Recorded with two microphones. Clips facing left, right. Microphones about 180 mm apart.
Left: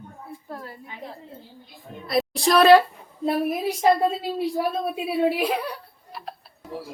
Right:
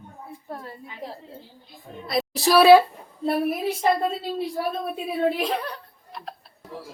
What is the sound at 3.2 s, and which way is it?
A woman's voice, 10° left (ahead or behind).